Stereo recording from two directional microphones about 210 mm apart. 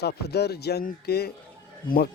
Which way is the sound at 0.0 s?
50° left (ahead or behind).